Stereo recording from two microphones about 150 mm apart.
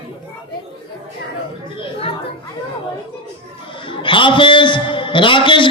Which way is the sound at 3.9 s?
35° left (ahead or behind).